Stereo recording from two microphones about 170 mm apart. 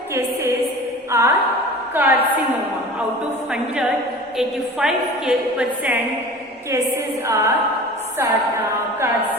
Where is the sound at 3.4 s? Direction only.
5° right (ahead or behind).